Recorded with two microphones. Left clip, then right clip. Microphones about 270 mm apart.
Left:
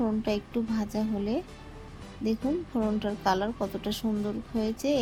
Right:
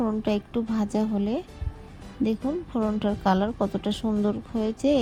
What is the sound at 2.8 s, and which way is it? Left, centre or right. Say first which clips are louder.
A woman's voice: right 3 dB; right.